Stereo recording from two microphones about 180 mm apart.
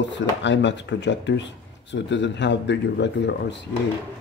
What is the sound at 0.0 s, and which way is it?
Speech, 80° left.